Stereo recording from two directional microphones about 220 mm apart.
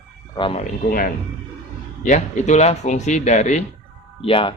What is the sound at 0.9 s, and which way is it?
Speech, 40° left (ahead or behind).